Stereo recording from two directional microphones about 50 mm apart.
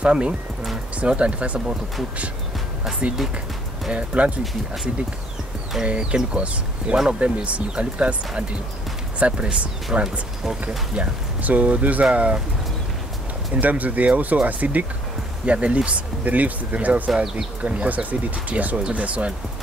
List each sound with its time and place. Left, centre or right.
0.0 s speech: right
3.9 s speech: right
5.9 s speech: centre
13.5 s speech: right
15.4 s speech: right
17.1 s speech: centre
17.6 s speech: right